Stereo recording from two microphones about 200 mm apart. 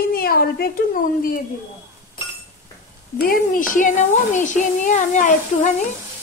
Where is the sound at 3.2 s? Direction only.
45° left (ahead or behind).